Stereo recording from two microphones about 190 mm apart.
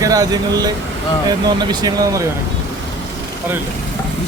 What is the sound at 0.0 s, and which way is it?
Speech, 20° right (ahead or behind).